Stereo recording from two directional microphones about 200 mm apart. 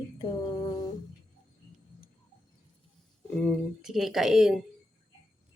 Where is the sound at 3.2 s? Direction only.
Centre (ahead or behind).